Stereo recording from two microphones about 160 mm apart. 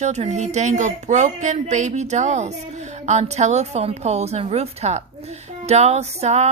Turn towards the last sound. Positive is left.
turn(degrees=-45)  # may be behind; listen again after turning